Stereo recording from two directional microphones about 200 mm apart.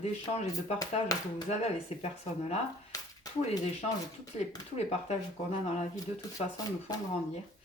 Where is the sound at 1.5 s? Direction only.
35° left (ahead or behind).